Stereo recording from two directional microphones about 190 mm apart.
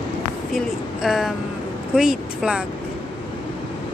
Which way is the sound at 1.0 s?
Centre (ahead or behind).